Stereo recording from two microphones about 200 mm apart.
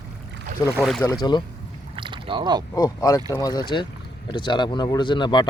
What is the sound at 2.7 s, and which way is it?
Speech, 20° left (ahead or behind).